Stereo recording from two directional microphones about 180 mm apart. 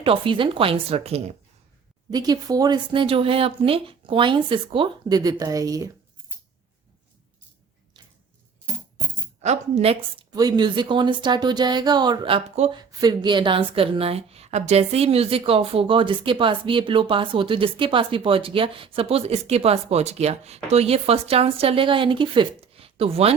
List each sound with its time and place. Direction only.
0.0 s a woman's voice: 30° right (ahead or behind)
2.0 s speech: 20° right (ahead or behind)
9.4 s a woman's voice: 40° right (ahead or behind)
10.3 s speech: 20° right (ahead or behind)
13.0 s a woman's voice: 20° right (ahead or behind)